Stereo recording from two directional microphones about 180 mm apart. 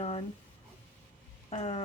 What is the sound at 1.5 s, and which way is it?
Speech, 35° left (ahead or behind).